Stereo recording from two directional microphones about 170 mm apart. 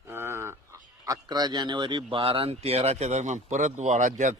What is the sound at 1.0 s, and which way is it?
Speech, 20° right (ahead or behind).